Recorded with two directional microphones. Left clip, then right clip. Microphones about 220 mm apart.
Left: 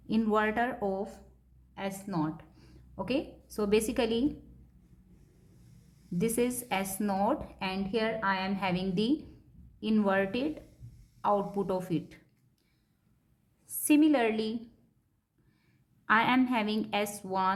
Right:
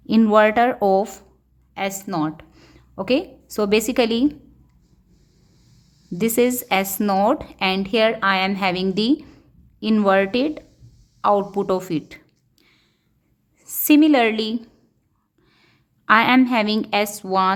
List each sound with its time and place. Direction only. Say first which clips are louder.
0.1 s a woman's voice: right 14 dB; 35° right (ahead or behind)
2.0 s a sound: right 10 dB; 40° right (ahead or behind)
3.5 s a woman's voice: right 10 dB; 35° right (ahead or behind)
6.1 s a woman's voice: right 11 dB; 35° right (ahead or behind)
13.7 s a woman's voice: right 10 dB; 35° right (ahead or behind)
15.4 s a sound: right 15 dB; 30° right (ahead or behind)
17.2 s a woman's voice: right 12 dB; 30° right (ahead or behind)